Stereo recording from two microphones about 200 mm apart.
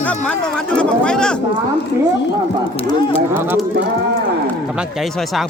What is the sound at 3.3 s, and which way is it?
Speech, 10° right (ahead or behind).